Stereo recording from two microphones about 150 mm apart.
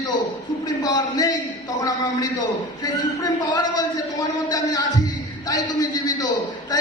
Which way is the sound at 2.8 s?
25° left (ahead or behind).